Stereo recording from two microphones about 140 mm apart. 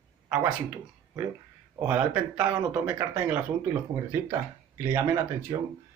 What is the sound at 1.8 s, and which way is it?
Speech, 10° right (ahead or behind).